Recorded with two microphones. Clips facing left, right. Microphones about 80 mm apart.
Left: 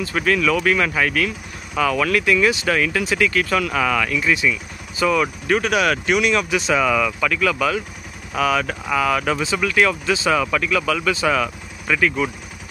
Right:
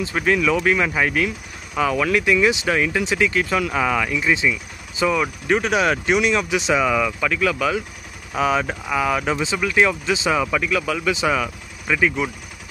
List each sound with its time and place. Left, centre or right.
0.0 s speech: centre